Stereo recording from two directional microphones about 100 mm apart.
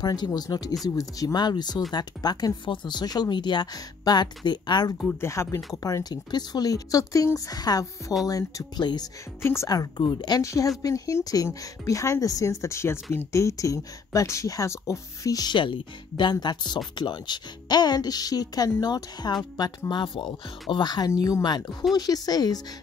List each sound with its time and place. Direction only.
0.0 s speech: 45° left (ahead or behind)
4.9 s speech: 20° left (ahead or behind); by 9.1 s 45° left (ahead or behind)
9.4 s speech: 25° left (ahead or behind)
9.7 s speech: 40° left (ahead or behind)
10.4 s speech: 30° left (ahead or behind)